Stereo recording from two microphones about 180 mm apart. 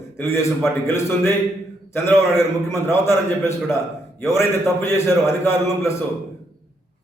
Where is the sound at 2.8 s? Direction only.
15° left (ahead or behind).